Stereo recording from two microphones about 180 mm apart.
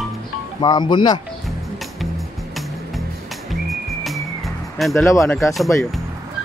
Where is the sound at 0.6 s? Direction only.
25° left (ahead or behind).